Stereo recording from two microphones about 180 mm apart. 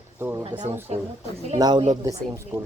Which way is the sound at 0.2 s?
10° right (ahead or behind).